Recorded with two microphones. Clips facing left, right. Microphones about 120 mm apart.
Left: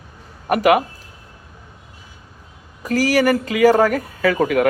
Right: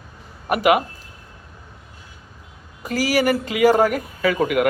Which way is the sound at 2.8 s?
40° left (ahead or behind).